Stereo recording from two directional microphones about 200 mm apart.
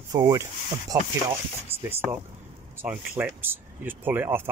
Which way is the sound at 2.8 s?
10° right (ahead or behind).